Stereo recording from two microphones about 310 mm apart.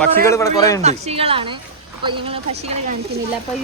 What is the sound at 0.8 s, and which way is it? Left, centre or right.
A woman's voice, right.